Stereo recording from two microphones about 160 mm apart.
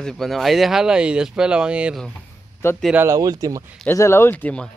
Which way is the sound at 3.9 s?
15° left (ahead or behind).